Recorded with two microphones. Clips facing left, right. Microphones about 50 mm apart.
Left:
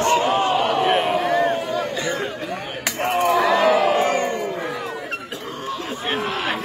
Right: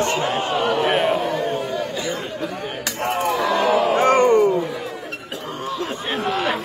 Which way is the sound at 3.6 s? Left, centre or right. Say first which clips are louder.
Left 1 dB; left.